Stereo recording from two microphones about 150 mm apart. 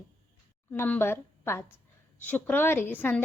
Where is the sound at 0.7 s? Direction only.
10° left (ahead or behind).